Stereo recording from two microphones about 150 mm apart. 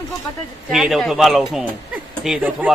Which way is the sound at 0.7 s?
Centre (ahead or behind).